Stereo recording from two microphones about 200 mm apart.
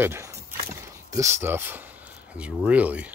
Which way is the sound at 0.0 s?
15° right (ahead or behind).